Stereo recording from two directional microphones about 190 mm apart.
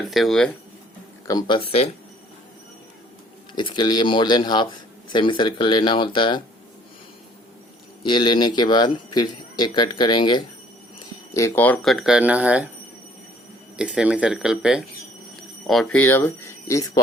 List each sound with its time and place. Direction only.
0.0 s speech: centre (ahead or behind)
1.3 s speech: 20° left (ahead or behind)
3.5 s speech: 25° left (ahead or behind)
8.0 s speech: 25° left (ahead or behind); by 12.6 s 5° right (ahead or behind)
13.7 s speech: 5° right (ahead or behind); by 17.0 s 15° left (ahead or behind)